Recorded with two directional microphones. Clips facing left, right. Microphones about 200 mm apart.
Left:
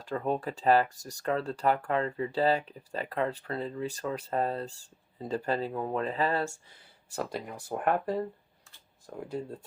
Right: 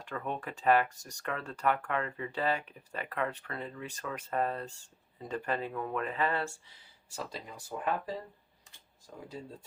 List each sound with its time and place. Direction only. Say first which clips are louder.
0.0 s speech: left 7 dB; 35° left (ahead or behind); by 9.2 s 55° left (ahead or behind)